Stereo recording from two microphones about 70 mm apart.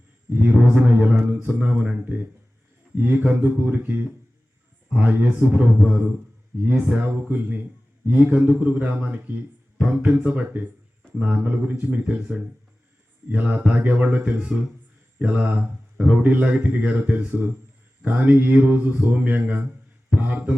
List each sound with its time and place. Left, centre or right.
0.3 s speech: right
14.5 s speech: centre
15.2 s speech: right
18.0 s mantra: right